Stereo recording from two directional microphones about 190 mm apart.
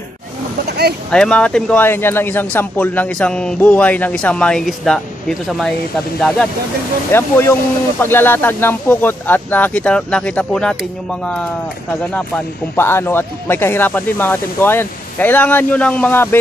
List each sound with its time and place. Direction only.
0.7 s vehicle: 60° right (ahead or behind)
1.1 s speech: 5° left (ahead or behind)
7.1 s speech: 10° left (ahead or behind)
12.1 s speech: 5° left (ahead or behind)